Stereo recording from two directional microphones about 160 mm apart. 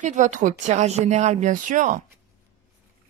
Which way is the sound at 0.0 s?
50° right (ahead or behind).